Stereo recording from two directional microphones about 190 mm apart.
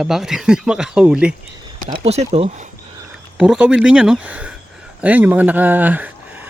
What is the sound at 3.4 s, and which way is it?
A man's voice, 5° right (ahead or behind).